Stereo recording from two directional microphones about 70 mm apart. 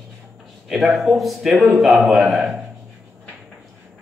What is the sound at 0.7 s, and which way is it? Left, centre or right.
Speech, centre.